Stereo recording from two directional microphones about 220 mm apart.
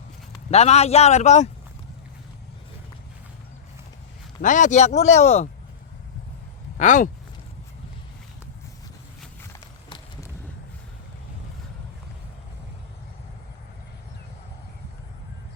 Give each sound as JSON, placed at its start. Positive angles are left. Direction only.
{"t": 0.5, "sound": "a man's voice", "side_deg": 30}
{"t": 4.4, "sound": "speech", "side_deg": 35}
{"t": 6.7, "sound": "speech", "side_deg": 35}